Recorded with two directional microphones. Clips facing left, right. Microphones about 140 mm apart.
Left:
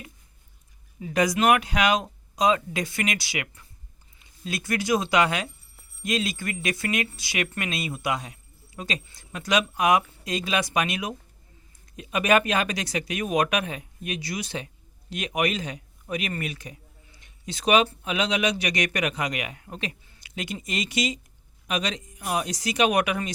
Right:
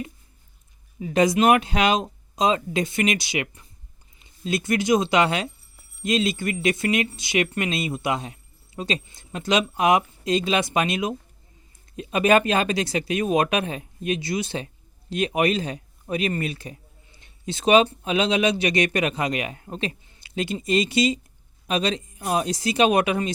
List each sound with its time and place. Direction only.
0.9 s speech: 25° right (ahead or behind)